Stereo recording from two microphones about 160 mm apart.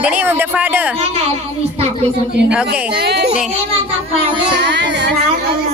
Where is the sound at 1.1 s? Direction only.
40° right (ahead or behind).